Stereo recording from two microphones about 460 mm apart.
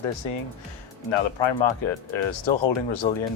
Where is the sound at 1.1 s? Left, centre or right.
Left.